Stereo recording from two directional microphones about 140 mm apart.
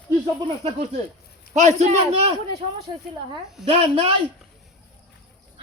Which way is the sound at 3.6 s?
45° right (ahead or behind).